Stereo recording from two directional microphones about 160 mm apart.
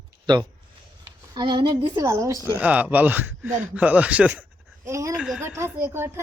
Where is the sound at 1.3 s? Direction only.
30° right (ahead or behind).